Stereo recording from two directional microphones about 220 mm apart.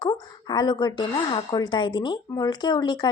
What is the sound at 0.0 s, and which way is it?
A woman's voice, 20° left (ahead or behind).